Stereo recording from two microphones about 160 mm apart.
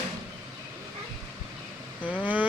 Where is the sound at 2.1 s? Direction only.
10° right (ahead or behind).